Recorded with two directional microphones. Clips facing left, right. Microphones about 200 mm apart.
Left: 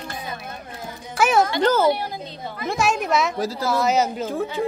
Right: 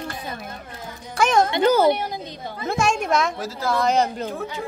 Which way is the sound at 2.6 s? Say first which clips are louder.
Even; 5° left (ahead or behind).